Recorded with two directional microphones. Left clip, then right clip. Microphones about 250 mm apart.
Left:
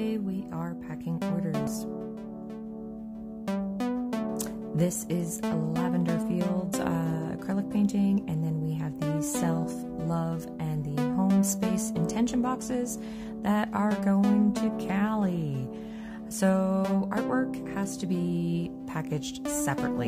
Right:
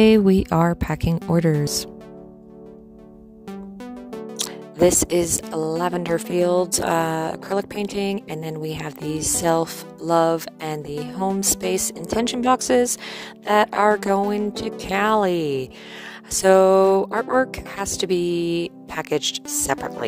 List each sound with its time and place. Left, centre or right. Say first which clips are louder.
0.0 s speech: right 18 dB; right
4.3 s music: right 4 dB; right
14.9 s speech: right 17 dB; right
16.4 s music: right 14 dB; right